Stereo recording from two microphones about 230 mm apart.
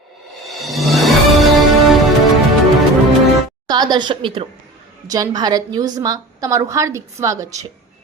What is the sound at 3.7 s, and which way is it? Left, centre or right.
A woman's voice, centre.